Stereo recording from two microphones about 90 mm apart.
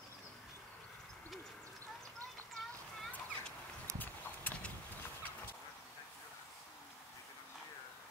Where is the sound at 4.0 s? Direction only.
20° left (ahead or behind).